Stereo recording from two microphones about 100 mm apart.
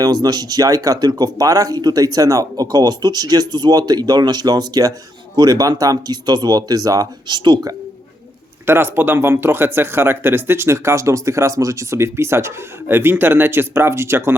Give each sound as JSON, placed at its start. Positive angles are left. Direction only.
{"t": 0.0, "sound": "speech", "side_deg": -40}
{"t": 8.6, "sound": "speech", "side_deg": -25}